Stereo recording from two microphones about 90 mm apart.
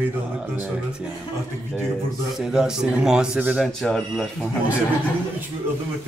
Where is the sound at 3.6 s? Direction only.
5° left (ahead or behind).